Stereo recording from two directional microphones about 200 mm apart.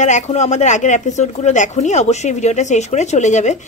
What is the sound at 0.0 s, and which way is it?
Speech, 35° left (ahead or behind).